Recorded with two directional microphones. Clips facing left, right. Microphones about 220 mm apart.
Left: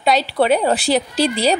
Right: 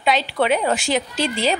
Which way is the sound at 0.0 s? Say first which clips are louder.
Left 3 dB; 40° left (ahead or behind).